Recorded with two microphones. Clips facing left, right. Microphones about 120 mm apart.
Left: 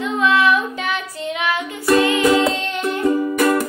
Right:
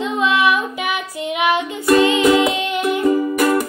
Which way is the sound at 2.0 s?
15° right (ahead or behind).